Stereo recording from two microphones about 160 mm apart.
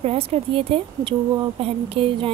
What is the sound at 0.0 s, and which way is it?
Speech, 40° right (ahead or behind).